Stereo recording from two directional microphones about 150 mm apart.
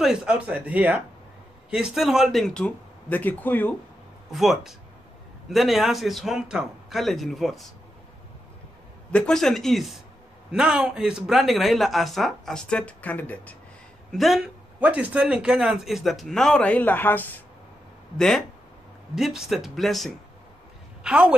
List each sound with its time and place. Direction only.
0.0 s speech: 5° right (ahead or behind); by 3.7 s 10° left (ahead or behind)
4.3 s speech: centre (ahead or behind)
9.1 s speech: 5° left (ahead or behind)
14.1 s a woman's voice: centre (ahead or behind)